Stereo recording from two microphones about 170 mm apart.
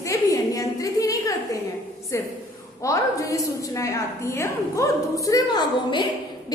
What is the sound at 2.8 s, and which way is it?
A woman's voice, 20° left (ahead or behind).